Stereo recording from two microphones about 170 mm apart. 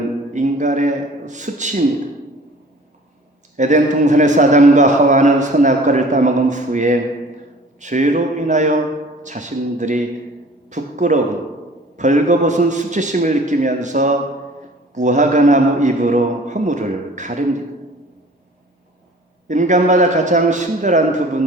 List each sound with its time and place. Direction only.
0.3 s a man's voice: 45° right (ahead or behind)
3.6 s a man's voice: 45° right (ahead or behind)
19.5 s a man's voice: 45° right (ahead or behind)